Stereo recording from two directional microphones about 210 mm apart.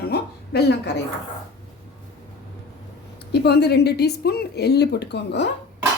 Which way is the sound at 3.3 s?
50° left (ahead or behind).